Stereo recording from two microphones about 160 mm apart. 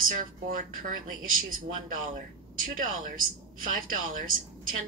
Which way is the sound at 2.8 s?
60° right (ahead or behind).